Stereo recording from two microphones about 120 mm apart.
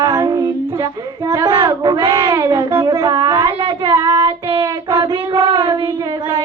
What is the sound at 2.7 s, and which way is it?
Music, 35° right (ahead or behind).